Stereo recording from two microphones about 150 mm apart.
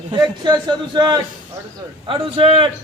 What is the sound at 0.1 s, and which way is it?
A man's voice, 30° right (ahead or behind).